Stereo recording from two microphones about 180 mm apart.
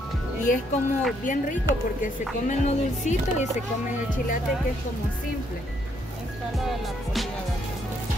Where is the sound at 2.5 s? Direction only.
40° left (ahead or behind).